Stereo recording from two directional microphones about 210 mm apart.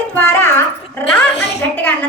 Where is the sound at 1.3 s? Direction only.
55° left (ahead or behind).